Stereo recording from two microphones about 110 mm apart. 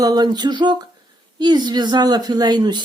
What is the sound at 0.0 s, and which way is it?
A woman's voice, 35° right (ahead or behind).